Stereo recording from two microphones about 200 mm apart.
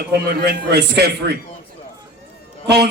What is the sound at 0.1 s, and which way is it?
A man's voice, 50° right (ahead or behind).